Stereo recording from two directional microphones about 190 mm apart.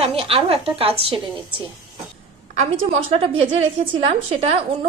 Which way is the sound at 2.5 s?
30° right (ahead or behind).